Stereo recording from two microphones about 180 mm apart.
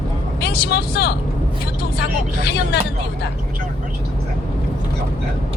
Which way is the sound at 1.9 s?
65° left (ahead or behind).